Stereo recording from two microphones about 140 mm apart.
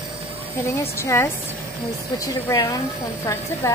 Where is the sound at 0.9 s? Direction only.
20° left (ahead or behind).